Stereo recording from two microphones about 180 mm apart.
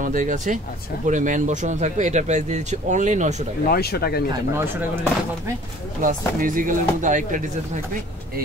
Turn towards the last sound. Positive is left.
turn(degrees=-45)  # may be behind; listen again after turning